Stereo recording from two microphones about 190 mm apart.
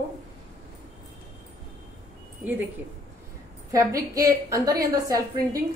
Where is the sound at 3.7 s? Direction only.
15° right (ahead or behind).